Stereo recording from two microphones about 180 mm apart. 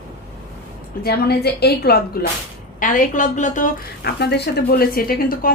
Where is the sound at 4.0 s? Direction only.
65° left (ahead or behind).